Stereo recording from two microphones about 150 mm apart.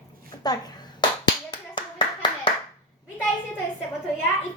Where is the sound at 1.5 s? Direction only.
30° left (ahead or behind).